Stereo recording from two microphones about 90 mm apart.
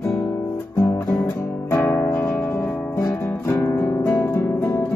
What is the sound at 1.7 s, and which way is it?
Music, 30° left (ahead or behind).